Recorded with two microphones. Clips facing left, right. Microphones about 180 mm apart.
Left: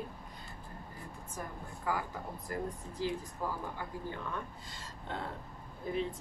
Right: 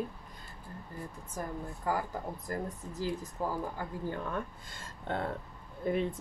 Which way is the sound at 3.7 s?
50° right (ahead or behind).